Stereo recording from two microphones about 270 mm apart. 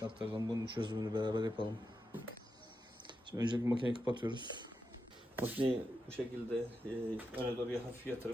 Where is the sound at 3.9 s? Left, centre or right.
Centre.